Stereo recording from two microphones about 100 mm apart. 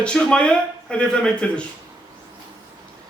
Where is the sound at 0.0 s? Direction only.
10° left (ahead or behind).